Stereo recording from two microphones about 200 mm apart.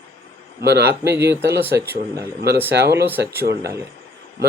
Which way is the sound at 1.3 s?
10° right (ahead or behind).